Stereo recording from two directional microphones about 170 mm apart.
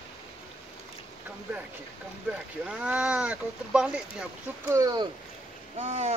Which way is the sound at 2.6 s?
5° right (ahead or behind).